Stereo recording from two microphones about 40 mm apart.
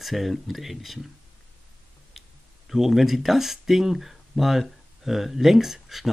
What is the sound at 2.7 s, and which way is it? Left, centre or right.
Speech, centre.